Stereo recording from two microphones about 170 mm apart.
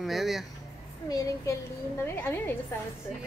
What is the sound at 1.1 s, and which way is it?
A child's voice, 20° left (ahead or behind).